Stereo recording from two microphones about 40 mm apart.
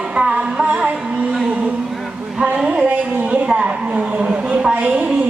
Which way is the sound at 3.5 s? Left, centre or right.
Right.